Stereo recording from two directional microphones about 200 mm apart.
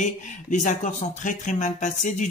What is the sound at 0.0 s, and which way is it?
Speech, 40° left (ahead or behind).